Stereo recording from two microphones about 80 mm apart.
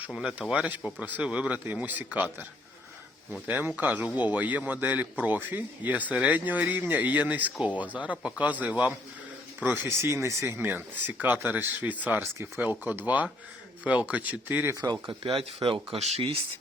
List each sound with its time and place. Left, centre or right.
0.1 s a man's voice: centre
9.8 s a man's voice: right
15.0 s speech: right